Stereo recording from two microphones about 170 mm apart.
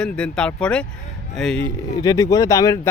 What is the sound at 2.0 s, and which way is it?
Speech, 20° left (ahead or behind).